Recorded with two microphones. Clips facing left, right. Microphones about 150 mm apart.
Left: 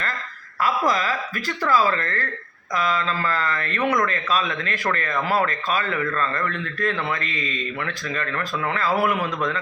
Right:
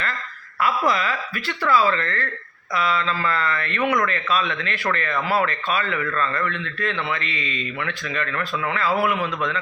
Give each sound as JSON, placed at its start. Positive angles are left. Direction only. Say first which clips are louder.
{"t": 0.6, "sound": "speech", "louder": "even", "side_deg": 40}